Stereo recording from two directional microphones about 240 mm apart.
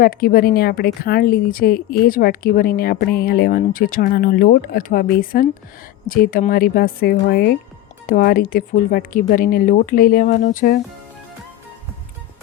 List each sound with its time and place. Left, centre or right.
0.0 s a woman's voice: left